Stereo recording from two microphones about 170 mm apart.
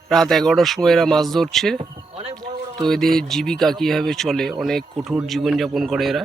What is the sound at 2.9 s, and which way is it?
Speech, 5° left (ahead or behind).